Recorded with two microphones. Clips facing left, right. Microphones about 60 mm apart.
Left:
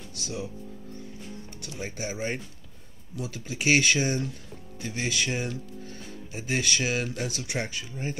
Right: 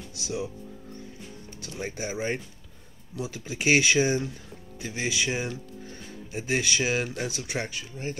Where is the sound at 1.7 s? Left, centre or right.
Centre.